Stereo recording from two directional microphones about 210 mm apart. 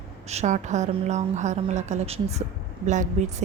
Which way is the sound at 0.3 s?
35° right (ahead or behind).